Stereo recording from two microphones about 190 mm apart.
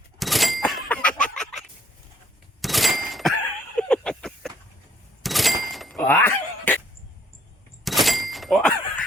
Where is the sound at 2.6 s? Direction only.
Centre (ahead or behind).